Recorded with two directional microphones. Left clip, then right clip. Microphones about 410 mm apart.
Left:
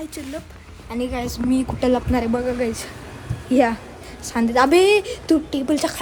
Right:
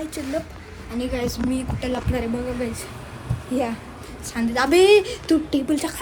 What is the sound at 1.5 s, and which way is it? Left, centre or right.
A woman's voice, centre.